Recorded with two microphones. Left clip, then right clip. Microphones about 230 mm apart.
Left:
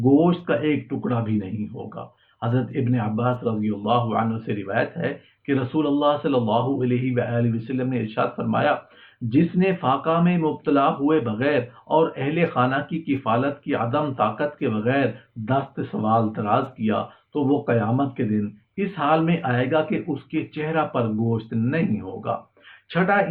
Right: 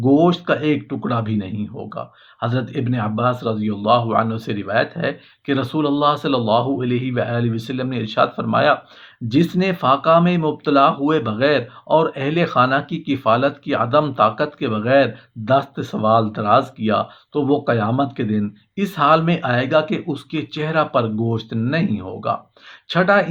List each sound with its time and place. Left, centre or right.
0.2 s speech: right